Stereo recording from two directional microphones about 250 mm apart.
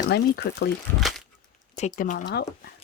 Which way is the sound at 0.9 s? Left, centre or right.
Centre.